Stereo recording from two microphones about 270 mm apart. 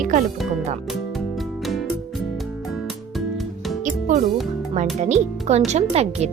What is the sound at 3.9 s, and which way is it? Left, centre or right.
Music, right.